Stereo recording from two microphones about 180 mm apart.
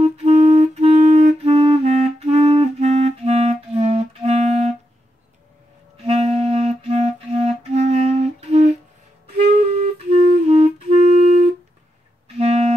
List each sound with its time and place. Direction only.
0.0 s clarinet: 40° right (ahead or behind)
6.0 s clarinet: 35° right (ahead or behind)
10.1 s clarinet: 35° right (ahead or behind)
12.4 s music: 35° right (ahead or behind)